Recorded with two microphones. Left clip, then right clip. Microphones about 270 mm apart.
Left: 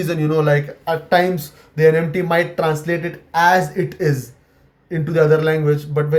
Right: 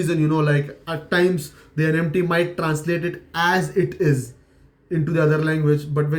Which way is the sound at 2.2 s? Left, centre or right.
Left.